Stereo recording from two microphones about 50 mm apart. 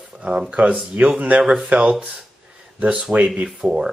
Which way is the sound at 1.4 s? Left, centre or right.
Centre.